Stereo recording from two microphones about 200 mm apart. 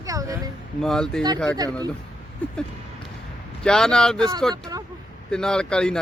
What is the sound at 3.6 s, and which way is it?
Speech, 5° left (ahead or behind).